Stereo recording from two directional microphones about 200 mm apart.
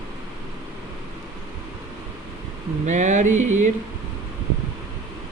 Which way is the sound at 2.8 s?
35° right (ahead or behind).